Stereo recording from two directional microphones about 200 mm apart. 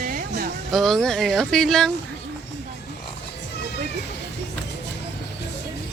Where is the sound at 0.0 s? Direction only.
45° right (ahead or behind).